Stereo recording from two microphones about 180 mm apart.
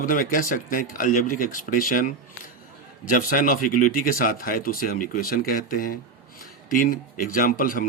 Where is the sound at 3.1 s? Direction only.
50° left (ahead or behind).